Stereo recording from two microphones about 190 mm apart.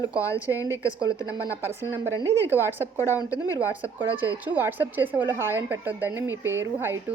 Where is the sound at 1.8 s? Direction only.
15° left (ahead or behind).